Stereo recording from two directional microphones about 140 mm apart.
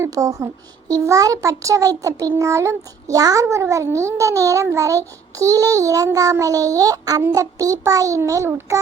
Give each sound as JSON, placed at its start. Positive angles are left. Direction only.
{"t": 0.0, "sound": "a child's voice", "side_deg": -25}